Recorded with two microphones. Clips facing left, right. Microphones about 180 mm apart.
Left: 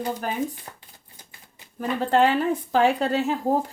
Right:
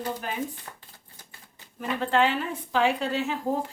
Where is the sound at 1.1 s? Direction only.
15° left (ahead or behind).